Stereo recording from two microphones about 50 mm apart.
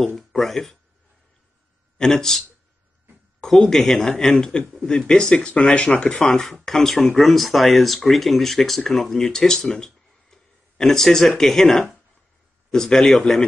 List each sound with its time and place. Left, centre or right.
0.1 s speech: centre
2.0 s speech: centre
3.4 s speech: centre